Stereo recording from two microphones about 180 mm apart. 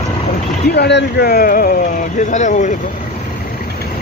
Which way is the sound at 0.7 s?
70° left (ahead or behind).